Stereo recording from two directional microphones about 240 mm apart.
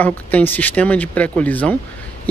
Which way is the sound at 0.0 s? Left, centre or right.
Centre.